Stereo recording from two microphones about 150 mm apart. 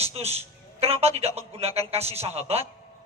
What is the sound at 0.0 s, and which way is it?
A man's voice, 45° right (ahead or behind).